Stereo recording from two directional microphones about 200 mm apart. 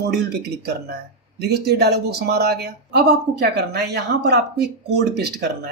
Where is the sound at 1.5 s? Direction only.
55° right (ahead or behind).